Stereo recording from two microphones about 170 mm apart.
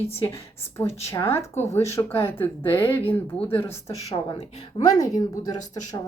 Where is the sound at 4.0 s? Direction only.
35° left (ahead or behind).